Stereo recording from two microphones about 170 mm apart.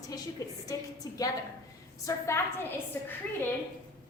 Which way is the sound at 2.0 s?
15° left (ahead or behind).